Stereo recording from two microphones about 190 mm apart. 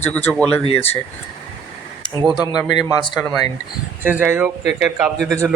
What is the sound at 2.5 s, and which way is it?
Speech, 20° left (ahead or behind).